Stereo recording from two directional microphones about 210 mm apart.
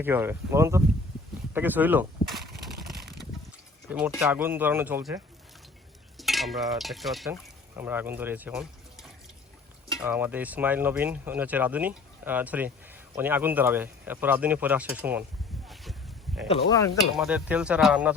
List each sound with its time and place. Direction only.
0.0 s speech: 10° right (ahead or behind)
1.5 s a sound: 10° right (ahead or behind)
3.8 s speech: 10° right (ahead or behind)
6.1 s stir: centre (ahead or behind)
7.8 s speech: 10° right (ahead or behind)
15.6 s a sound: centre (ahead or behind)
16.5 s speech: 30° left (ahead or behind)
17.2 s speech: 5° right (ahead or behind)